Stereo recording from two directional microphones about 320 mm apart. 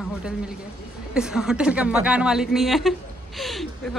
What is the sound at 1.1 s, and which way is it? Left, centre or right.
A man's voice, centre.